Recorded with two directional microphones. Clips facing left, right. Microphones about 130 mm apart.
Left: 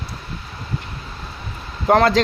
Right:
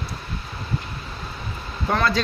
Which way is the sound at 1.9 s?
85° left.